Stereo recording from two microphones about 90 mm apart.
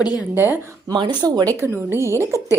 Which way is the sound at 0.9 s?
60° right (ahead or behind).